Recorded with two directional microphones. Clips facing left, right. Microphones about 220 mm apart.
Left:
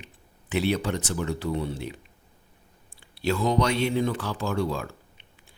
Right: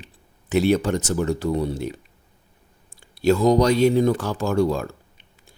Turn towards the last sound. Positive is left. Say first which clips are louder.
# right 2 dB
turn(degrees=-45)  # may be behind; listen again after turning